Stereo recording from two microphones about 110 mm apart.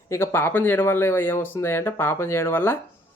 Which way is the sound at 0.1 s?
25° left (ahead or behind).